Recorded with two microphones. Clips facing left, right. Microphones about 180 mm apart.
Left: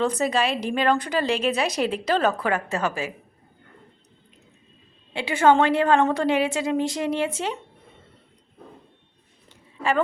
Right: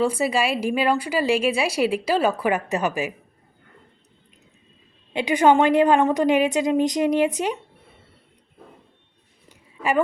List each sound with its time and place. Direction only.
0.0 s a woman's voice: 10° right (ahead or behind)
5.1 s a woman's voice: 15° right (ahead or behind)
9.5 s a sound: 15° right (ahead or behind)